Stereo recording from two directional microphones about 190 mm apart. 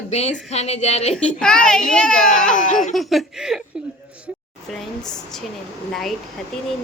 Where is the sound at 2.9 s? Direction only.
Centre (ahead or behind).